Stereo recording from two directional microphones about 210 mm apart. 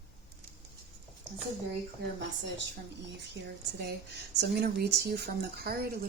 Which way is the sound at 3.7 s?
50° right (ahead or behind).